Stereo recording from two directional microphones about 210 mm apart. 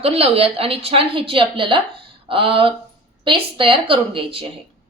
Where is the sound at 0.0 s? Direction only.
30° right (ahead or behind).